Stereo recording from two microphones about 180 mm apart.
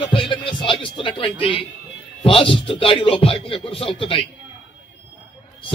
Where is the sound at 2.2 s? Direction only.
30° left (ahead or behind).